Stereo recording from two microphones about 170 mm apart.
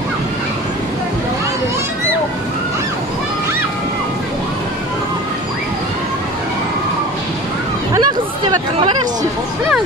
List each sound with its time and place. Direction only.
7.9 s hubbub: 25° right (ahead or behind)